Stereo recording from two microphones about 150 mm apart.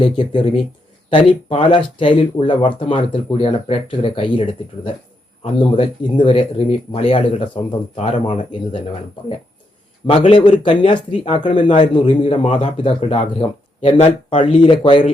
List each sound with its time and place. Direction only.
1.1 s speech: 35° left (ahead or behind)
10.1 s speech: 35° left (ahead or behind)